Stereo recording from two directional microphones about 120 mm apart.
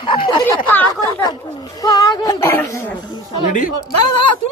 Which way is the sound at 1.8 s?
30° left (ahead or behind).